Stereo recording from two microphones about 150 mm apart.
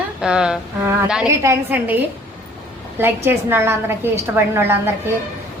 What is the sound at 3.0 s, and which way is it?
A woman's voice, 15° right (ahead or behind).